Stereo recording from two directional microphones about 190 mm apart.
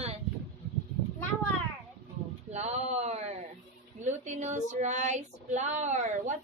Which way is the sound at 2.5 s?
35° right (ahead or behind).